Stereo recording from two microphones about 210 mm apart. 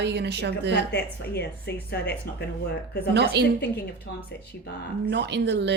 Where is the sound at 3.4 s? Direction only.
55° right (ahead or behind).